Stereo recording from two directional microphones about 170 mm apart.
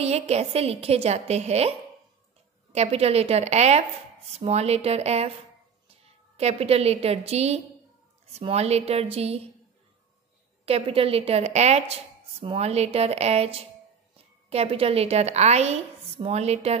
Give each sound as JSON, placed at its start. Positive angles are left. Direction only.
{"t": 0.0, "sound": "a woman's voice", "side_deg": -40}
{"t": 10.6, "sound": "a woman's voice", "side_deg": -35}